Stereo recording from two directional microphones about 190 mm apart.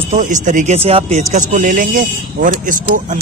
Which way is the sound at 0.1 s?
40° right (ahead or behind).